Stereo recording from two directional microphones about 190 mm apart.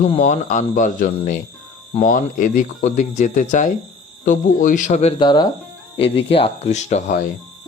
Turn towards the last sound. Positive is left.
turn(degrees=40)  # may be behind; listen again after turning